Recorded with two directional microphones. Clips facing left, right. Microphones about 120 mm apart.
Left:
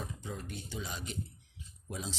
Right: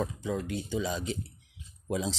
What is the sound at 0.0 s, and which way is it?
Speech, 90° right.